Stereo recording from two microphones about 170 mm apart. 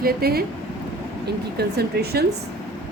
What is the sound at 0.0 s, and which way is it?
Speech, 65° right (ahead or behind).